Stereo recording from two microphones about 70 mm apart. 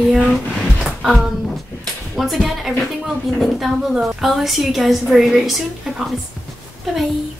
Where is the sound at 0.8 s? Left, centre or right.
Centre.